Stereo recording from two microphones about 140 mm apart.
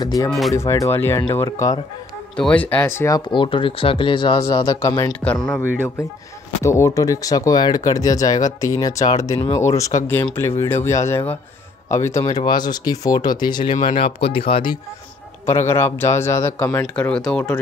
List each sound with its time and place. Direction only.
0.0 s speech: 25° left (ahead or behind)
2.3 s speech: 10° left (ahead or behind)
3.3 s speech: 35° left (ahead or behind)
5.2 s speech: 5° left (ahead or behind)
6.6 s speech: 20° left (ahead or behind)
13.8 s speech: 45° left (ahead or behind)
15.4 s speech: 20° left (ahead or behind)